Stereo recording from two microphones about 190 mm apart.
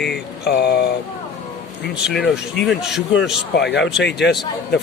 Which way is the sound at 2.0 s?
Centre (ahead or behind).